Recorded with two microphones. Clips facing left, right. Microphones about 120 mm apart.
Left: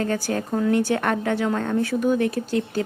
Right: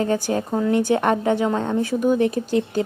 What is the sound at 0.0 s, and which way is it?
A woman's voice, 15° right (ahead or behind).